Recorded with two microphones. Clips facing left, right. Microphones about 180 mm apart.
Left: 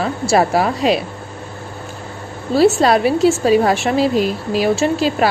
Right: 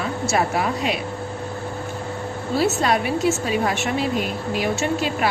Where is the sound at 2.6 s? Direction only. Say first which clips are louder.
Left 9 dB; 30° left (ahead or behind).